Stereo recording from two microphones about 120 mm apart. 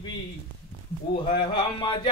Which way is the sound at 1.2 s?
40° left (ahead or behind).